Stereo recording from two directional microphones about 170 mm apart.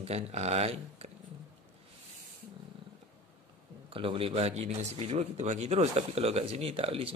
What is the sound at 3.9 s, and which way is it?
Speech, 30° right (ahead or behind).